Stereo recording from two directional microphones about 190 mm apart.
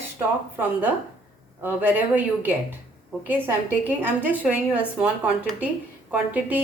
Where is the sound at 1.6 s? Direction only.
10° right (ahead or behind).